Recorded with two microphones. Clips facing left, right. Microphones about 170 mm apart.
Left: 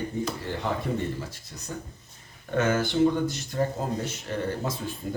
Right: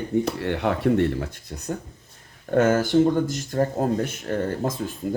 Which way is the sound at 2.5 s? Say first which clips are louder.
Right 6 dB; 50° right (ahead or behind).